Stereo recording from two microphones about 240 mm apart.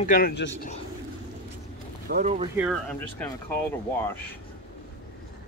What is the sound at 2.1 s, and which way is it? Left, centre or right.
Speech, right.